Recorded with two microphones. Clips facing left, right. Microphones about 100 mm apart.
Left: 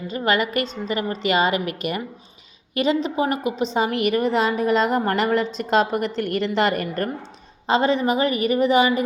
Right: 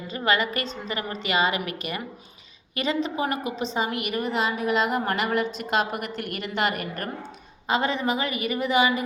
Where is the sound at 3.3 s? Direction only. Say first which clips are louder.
Left 5 dB; 40° right (ahead or behind).